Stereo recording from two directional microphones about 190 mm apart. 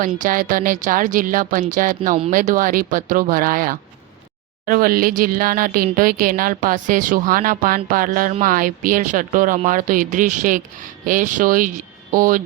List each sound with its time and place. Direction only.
0.0 s speech: 45° right (ahead or behind)